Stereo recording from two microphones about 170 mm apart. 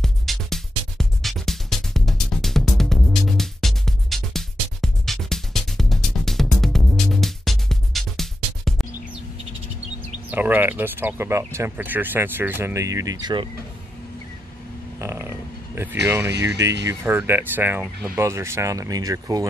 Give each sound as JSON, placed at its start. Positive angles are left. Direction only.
{"t": 0.0, "sound": "music", "side_deg": 0}
{"t": 10.3, "sound": "speech", "side_deg": -10}
{"t": 15.0, "sound": "a sound", "side_deg": -15}
{"t": 16.4, "sound": "speech", "side_deg": -20}